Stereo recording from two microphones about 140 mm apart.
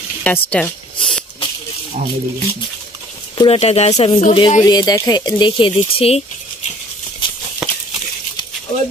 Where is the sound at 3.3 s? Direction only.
40° left (ahead or behind).